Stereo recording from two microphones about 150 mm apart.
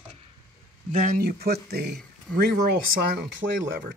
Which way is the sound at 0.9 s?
55° right (ahead or behind).